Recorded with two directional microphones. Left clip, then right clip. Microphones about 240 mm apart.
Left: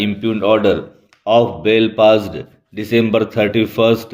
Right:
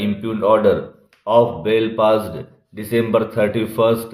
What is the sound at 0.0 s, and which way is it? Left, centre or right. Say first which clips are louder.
A man's voice: left 2 dB; left.